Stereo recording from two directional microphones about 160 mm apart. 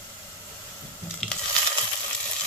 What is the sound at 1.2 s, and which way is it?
Sizzle, 5° left (ahead or behind).